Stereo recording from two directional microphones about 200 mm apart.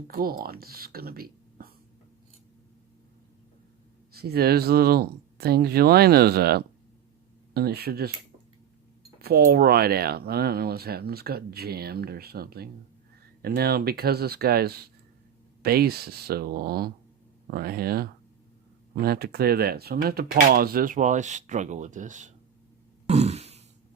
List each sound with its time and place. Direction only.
0.1 s speech: 45° right (ahead or behind)
4.1 s speech: 50° right (ahead or behind)
9.2 s speech: 50° right (ahead or behind)
23.0 s a sound: 35° right (ahead or behind)